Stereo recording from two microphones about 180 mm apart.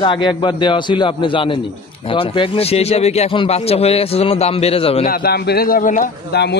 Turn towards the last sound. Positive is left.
turn(degrees=70)  # may be behind; listen again after turning